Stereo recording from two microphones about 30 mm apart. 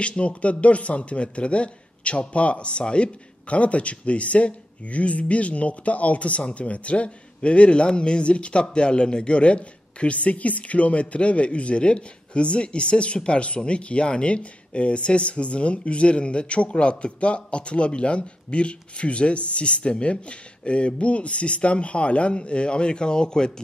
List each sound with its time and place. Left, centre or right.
0.0 s a man's voice: left